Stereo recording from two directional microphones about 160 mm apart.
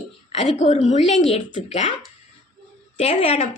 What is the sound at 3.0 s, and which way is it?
Speech, 45° left (ahead or behind).